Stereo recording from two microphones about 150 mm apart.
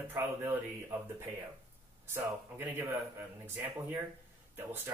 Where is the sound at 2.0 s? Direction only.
15° right (ahead or behind).